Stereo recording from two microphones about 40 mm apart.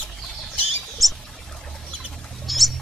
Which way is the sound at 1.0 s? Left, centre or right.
Centre.